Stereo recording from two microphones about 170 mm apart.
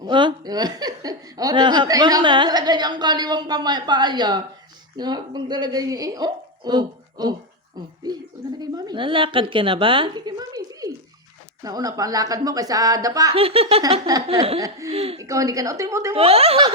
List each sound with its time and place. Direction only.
0.0 s speech: 25° right (ahead or behind)
13.3 s speech: 35° right (ahead or behind)
14.8 s speech: 35° right (ahead or behind)
15.2 s speech: 20° right (ahead or behind)
16.1 s speech: 35° right (ahead or behind)